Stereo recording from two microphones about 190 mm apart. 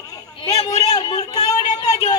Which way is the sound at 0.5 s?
25° left (ahead or behind).